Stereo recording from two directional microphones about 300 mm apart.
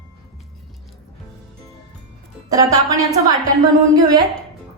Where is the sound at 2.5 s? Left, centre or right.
Centre.